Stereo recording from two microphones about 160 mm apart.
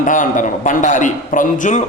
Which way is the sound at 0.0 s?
55° left (ahead or behind).